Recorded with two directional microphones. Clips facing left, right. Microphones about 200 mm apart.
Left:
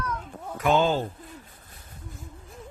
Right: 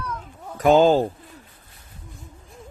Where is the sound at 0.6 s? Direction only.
40° right (ahead or behind).